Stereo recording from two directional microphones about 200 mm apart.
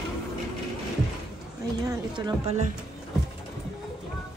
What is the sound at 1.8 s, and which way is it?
Speech, 20° right (ahead or behind).